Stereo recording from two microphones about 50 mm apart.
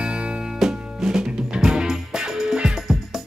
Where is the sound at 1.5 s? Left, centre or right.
Centre.